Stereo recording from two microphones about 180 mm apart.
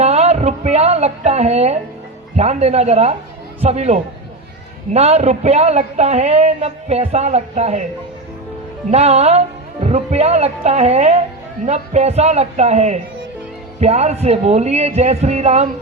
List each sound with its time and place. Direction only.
0.0 s a man's voice: 35° right (ahead or behind)
8.9 s a man's voice: 35° right (ahead or behind)